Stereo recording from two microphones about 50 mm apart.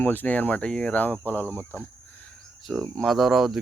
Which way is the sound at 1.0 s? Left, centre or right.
Left.